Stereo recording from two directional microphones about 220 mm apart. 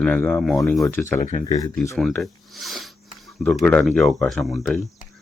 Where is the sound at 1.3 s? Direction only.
35° left (ahead or behind).